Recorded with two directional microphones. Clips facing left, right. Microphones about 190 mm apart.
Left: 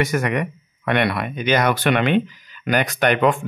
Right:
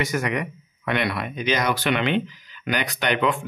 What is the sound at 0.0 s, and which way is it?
Speech, 55° left (ahead or behind).